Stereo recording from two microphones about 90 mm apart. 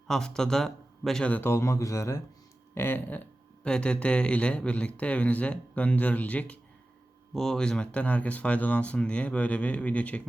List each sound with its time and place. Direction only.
0.1 s speech: 5° left (ahead or behind)
1.4 s speech: 30° left (ahead or behind)
2.7 s speech: 20° left (ahead or behind)